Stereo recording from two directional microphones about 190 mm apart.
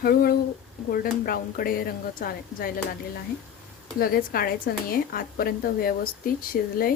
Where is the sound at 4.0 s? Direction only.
50° left (ahead or behind).